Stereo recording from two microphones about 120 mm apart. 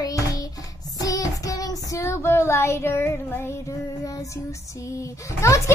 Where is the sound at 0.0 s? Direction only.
30° left (ahead or behind).